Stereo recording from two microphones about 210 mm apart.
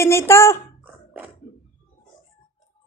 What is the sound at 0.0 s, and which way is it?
Speech, 10° left (ahead or behind).